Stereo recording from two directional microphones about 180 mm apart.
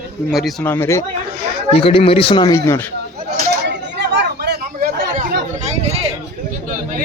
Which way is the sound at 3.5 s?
70° right (ahead or behind).